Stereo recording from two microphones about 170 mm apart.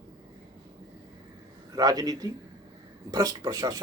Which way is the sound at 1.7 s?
20° right (ahead or behind).